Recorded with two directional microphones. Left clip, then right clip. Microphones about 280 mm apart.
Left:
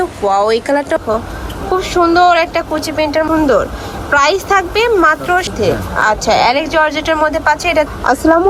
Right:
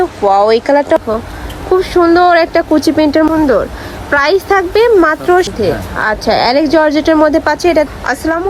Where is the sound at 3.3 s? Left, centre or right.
Centre.